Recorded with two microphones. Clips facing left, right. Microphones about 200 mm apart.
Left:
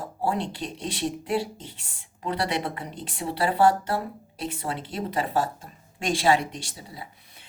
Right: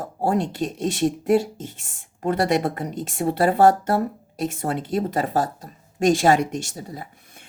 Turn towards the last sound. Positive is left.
turn(degrees=-50)  # may be behind; listen again after turning